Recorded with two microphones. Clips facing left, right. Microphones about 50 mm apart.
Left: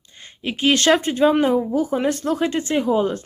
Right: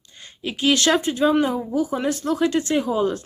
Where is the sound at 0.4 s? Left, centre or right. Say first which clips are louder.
Left 2 dB; left.